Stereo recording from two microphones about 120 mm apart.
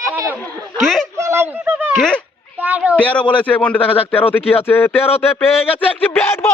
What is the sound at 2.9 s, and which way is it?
A man's voice, 10° left (ahead or behind).